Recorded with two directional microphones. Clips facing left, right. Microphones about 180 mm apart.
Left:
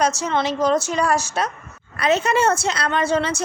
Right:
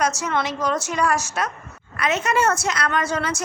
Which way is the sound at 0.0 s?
30° left (ahead or behind).